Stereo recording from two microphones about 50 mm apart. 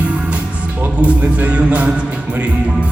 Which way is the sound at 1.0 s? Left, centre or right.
Right.